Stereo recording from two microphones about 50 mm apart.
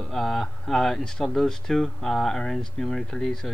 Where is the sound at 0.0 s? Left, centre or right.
Centre.